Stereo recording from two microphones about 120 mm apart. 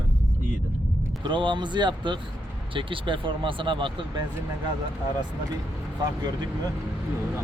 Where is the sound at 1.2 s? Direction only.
40° right (ahead or behind).